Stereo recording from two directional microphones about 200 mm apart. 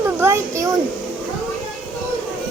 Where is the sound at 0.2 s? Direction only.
15° right (ahead or behind).